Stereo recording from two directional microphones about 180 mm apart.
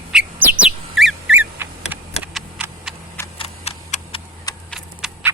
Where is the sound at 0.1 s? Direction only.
5° right (ahead or behind).